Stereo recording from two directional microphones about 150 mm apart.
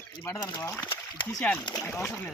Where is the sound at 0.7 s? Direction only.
10° left (ahead or behind).